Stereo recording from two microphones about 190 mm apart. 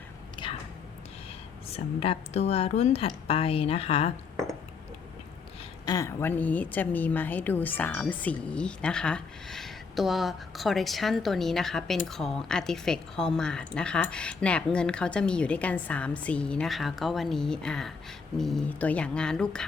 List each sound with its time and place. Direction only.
0.4 s a sound: 25° left (ahead or behind)
1.7 s speech: 30° left (ahead or behind)
5.8 s a woman's voice: 20° left (ahead or behind)